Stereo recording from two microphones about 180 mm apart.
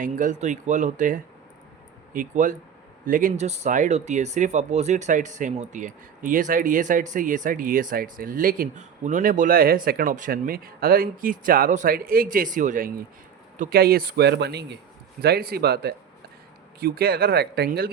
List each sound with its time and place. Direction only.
0.0 s a man's voice: 45° right (ahead or behind)